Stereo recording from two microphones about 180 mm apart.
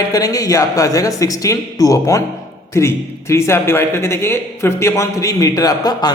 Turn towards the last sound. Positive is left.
turn(degrees=20)  # may be behind; listen again after turning